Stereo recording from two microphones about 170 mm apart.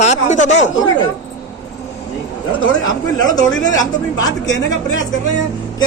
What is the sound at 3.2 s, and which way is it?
A man's voice, 20° left (ahead or behind).